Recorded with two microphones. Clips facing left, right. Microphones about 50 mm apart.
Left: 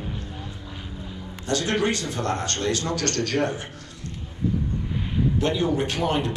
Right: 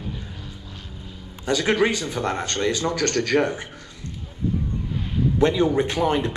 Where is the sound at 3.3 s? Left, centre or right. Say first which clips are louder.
Right 4 dB; right.